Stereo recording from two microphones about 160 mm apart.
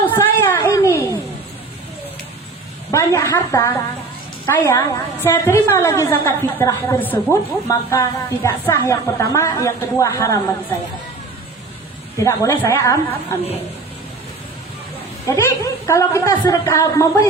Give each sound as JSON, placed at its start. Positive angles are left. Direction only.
{"t": 0.0, "sound": "a sound", "side_deg": 15}
{"t": 2.9, "sound": "a woman's voice", "side_deg": 15}
{"t": 12.1, "sound": "a woman's voice", "side_deg": 20}
{"t": 15.3, "sound": "a woman's voice", "side_deg": 20}